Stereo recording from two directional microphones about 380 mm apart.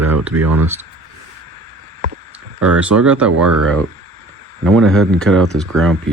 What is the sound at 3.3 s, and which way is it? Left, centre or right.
Speech, right.